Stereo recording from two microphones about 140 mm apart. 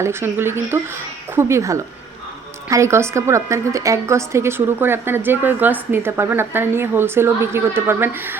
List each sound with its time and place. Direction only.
0.0 s a woman's voice: 15° right (ahead or behind)